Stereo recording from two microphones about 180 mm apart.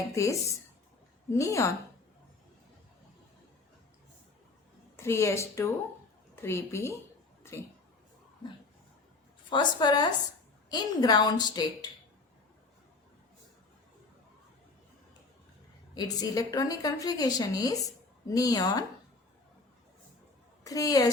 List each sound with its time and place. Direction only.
0.1 s a woman's voice: 15° left (ahead or behind)
4.9 s a woman's voice: 15° left (ahead or behind)
7.4 s a sound: 15° left (ahead or behind)
9.5 s a woman's voice: 25° left (ahead or behind)
16.0 s a woman's voice: 20° left (ahead or behind)
20.7 s a woman's voice: 20° left (ahead or behind)